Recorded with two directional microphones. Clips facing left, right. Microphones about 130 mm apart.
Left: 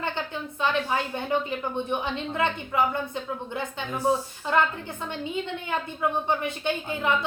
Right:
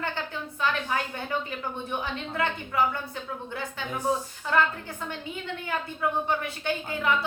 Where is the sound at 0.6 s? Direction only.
20° left (ahead or behind).